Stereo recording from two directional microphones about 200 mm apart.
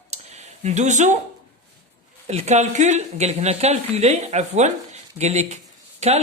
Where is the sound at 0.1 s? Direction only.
35° right (ahead or behind).